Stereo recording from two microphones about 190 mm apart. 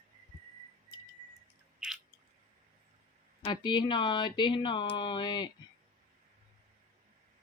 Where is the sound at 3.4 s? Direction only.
25° left (ahead or behind).